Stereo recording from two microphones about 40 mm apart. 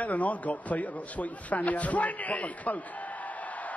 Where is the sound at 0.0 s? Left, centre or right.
Left.